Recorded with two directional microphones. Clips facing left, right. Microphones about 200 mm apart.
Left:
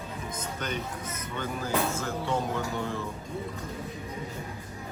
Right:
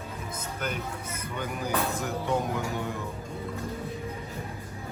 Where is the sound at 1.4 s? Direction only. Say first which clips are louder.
Left 1 dB; 15° right (ahead or behind).